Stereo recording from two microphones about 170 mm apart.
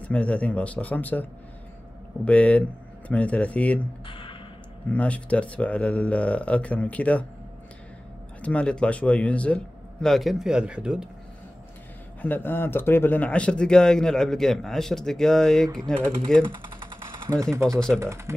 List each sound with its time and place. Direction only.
0.0 s speech: 10° left (ahead or behind)
2.2 s speech: 10° left (ahead or behind)
4.0 s a sound: 30° left (ahead or behind)
4.9 s speech: 10° left (ahead or behind)
8.4 s speech: 5° left (ahead or behind)
12.2 s speech: 10° left (ahead or behind)
15.7 s speech: 30° right (ahead or behind)
17.3 s speech: 20° right (ahead or behind)